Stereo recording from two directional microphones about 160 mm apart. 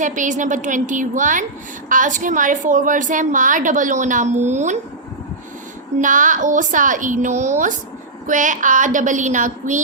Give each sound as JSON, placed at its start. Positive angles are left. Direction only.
{"t": 0.0, "sound": "a woman's voice", "side_deg": -50}
{"t": 6.0, "sound": "a woman's voice", "side_deg": -55}